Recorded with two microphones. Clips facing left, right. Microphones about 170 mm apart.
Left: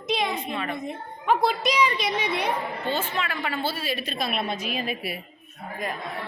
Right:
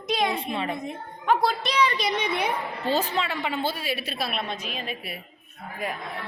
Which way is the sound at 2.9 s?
35° right (ahead or behind).